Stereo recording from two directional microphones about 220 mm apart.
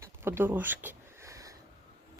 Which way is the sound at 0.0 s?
10° right (ahead or behind).